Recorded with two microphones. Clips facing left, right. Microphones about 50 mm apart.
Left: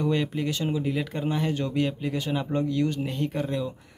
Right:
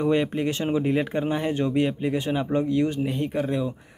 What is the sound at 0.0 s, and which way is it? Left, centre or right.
Speech, right.